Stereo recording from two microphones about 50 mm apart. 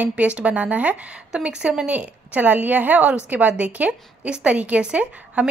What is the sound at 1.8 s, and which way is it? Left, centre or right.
A woman's voice, right.